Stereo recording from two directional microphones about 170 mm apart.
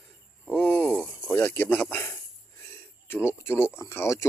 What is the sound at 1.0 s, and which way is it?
Speech, 10° left (ahead or behind).